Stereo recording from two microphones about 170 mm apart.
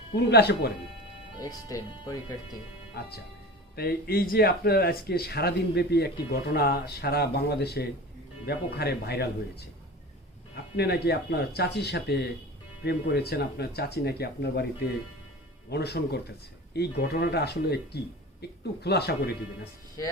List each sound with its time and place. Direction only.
0.2 s speech: 80° left
1.4 s speech: 20° left (ahead or behind)
3.0 s speech: 70° left (ahead or behind)
10.8 s speech: 70° left (ahead or behind)
15.7 s a woman's voice: 75° left (ahead or behind)